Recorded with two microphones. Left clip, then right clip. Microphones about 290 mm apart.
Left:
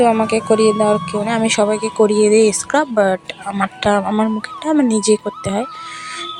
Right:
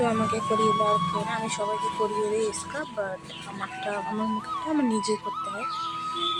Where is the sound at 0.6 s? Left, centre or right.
Centre.